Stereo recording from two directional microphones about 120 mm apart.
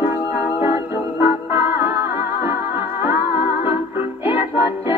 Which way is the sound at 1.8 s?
20° right (ahead or behind).